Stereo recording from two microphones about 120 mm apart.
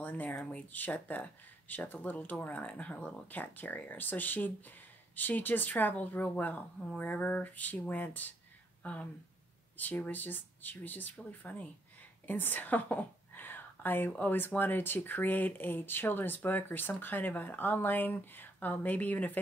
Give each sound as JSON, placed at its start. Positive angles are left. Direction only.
{"t": 0.0, "sound": "speech", "side_deg": 15}